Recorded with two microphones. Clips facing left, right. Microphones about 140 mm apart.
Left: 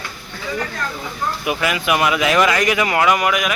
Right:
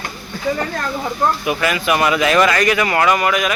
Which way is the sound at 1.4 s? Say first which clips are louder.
Right 2 dB; 15° left (ahead or behind).